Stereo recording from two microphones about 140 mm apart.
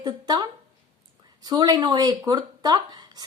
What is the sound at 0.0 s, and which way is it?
A woman's voice, 30° right (ahead or behind).